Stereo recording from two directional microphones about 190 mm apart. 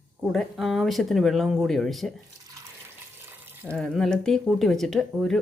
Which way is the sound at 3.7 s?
5° left (ahead or behind).